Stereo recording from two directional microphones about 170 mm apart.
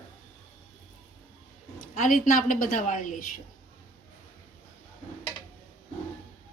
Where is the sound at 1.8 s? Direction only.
50° left (ahead or behind).